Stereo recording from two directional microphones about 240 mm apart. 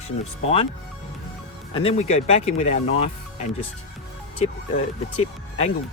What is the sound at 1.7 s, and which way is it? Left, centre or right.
Speech, left.